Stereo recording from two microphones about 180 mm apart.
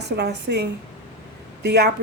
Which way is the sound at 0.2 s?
70° right (ahead or behind).